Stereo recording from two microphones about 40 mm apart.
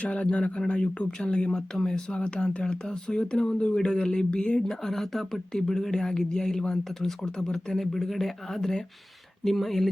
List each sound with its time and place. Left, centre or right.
0.0 s speech: left; by 2.1 s centre
2.1 s speech: left
4.6 s speech: centre